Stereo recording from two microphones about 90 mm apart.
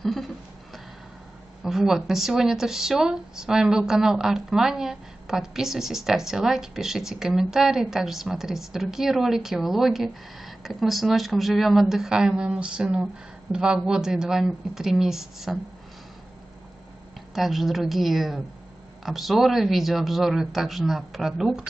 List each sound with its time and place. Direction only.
0.0 s a sound: centre (ahead or behind)
1.6 s speech: 5° right (ahead or behind)
17.3 s speech: centre (ahead or behind)